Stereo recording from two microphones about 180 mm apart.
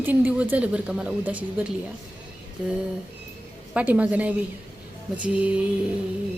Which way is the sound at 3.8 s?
10° right (ahead or behind).